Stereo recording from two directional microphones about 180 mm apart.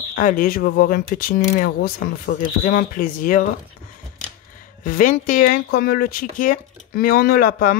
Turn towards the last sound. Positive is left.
turn(degrees=50)  # may be behind; listen again after turning